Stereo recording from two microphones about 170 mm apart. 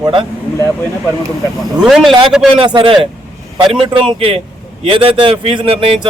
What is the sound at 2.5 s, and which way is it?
A man's voice, 30° right (ahead or behind).